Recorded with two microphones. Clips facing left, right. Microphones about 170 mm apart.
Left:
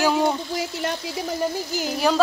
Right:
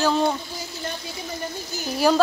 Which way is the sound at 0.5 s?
85° left.